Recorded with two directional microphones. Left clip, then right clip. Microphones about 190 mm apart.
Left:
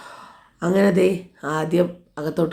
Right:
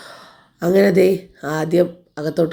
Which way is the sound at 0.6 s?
15° right (ahead or behind).